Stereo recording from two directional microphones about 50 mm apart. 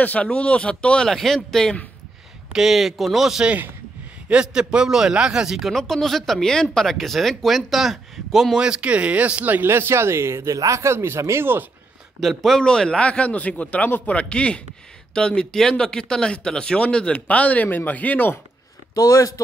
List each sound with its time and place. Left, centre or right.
0.0 s speech: left
1.1 s speech: centre
2.5 s speech: centre
4.3 s speech: centre
5.7 s speech: centre
8.5 s speech: centre
9.6 s speech: right
12.4 s speech: centre; by 14.2 s left
14.3 s speech: left